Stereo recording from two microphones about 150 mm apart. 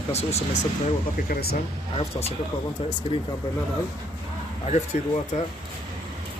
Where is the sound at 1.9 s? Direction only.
40° left (ahead or behind).